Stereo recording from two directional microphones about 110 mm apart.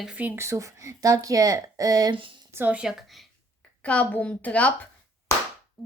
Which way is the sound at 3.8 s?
15° left (ahead or behind).